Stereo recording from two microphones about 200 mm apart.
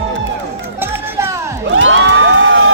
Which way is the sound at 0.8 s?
10° right (ahead or behind).